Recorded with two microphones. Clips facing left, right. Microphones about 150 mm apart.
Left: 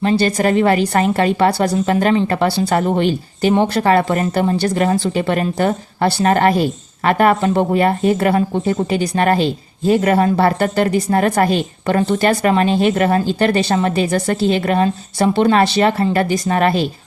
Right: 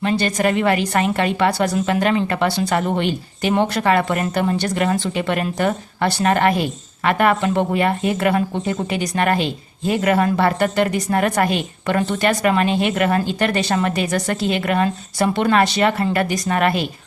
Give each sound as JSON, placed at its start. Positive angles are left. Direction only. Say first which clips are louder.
{"t": 0.0, "sound": "a woman's voice", "louder": "left 3 dB", "side_deg": 35}